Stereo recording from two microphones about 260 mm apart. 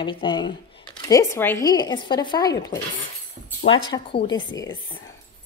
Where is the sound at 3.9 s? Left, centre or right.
Centre.